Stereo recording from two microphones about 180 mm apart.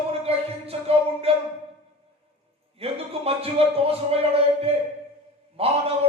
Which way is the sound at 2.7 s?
35° right (ahead or behind).